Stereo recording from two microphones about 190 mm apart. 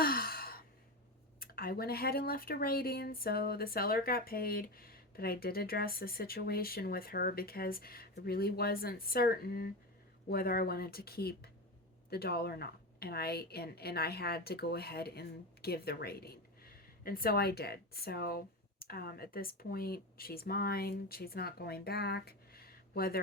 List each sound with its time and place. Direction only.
0.0 s sigh: 50° left (ahead or behind)
1.4 s a woman's voice: 50° left (ahead or behind)